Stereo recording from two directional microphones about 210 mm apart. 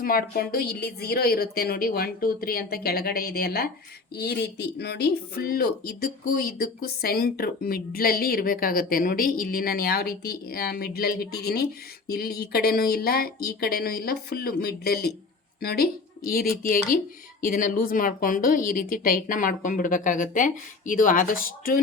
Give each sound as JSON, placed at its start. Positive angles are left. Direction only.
{"t": 0.0, "sound": "a woman's voice", "side_deg": 45}